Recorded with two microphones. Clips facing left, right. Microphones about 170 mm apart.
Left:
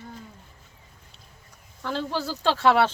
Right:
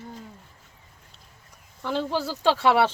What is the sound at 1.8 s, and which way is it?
Speech, 10° right (ahead or behind).